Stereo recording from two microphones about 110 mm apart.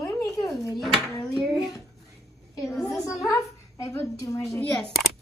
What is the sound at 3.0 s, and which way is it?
A woman's voice, 30° left (ahead or behind).